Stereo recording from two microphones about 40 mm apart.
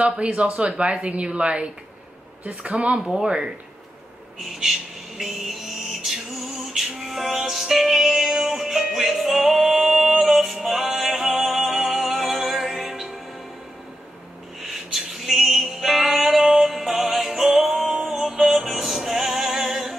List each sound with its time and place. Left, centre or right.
0.0 s a woman's voice: right
4.6 s music: centre
14.7 s music: centre